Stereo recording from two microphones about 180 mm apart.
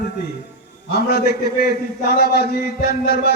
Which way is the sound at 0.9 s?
60° left (ahead or behind).